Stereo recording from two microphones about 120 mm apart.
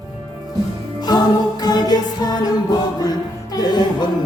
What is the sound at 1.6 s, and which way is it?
Music, 35° left (ahead or behind).